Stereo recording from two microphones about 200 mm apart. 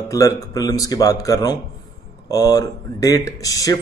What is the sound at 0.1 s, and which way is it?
A man's voice, 15° left (ahead or behind).